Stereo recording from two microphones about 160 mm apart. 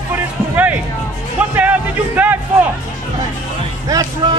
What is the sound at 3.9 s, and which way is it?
Speech, 25° right (ahead or behind).